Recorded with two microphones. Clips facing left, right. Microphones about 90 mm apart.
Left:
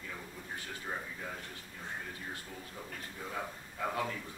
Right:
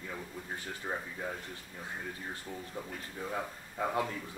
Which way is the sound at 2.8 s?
20° right (ahead or behind).